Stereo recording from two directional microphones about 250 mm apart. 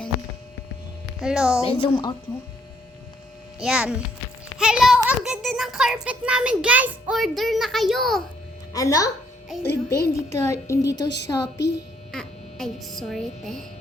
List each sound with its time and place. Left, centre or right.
1.2 s a child's voice: centre
1.6 s a woman's voice: left
3.6 s a child's voice: centre
8.7 s a child's voice: centre
10.2 s a child's voice: centre
12.1 s speech: centre